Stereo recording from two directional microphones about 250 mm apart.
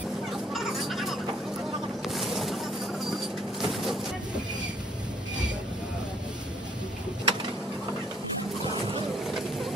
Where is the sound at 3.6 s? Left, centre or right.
Centre.